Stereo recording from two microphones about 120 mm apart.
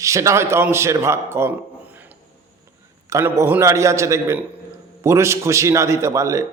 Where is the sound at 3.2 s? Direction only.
15° right (ahead or behind).